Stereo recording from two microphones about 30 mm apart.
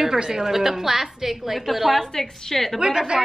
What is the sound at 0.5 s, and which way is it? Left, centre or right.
A woman's voice, centre.